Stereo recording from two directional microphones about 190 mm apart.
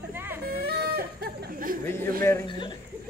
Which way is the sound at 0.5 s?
55° right (ahead or behind).